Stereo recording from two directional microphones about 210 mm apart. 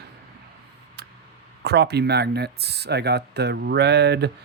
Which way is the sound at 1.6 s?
50° right (ahead or behind).